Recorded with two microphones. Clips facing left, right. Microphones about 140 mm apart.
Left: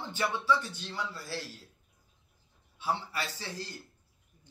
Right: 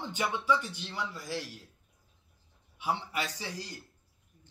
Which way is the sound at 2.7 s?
15° right (ahead or behind).